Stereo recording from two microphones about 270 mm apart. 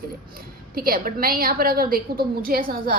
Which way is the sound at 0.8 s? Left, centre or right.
Right.